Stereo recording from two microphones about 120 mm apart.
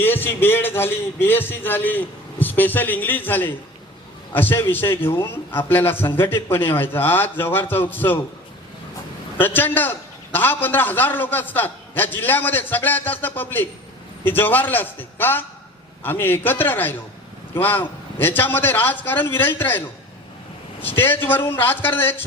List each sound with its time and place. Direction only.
0.0 s a man's voice: 15° left (ahead or behind)
9.4 s a man's voice: 15° left (ahead or behind)
20.8 s a man's voice: 15° left (ahead or behind)